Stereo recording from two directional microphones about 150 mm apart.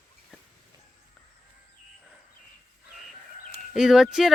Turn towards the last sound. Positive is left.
turn(degrees=-5)  # may be behind; listen again after turning